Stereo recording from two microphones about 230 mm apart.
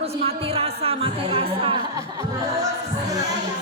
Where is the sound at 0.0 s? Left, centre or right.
Right.